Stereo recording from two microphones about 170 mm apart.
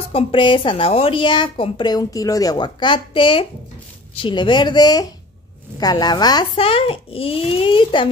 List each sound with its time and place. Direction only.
0.1 s a woman's voice: 30° left (ahead or behind)